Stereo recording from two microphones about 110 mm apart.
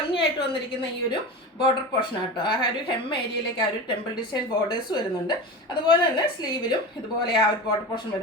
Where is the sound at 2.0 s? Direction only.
45° left (ahead or behind).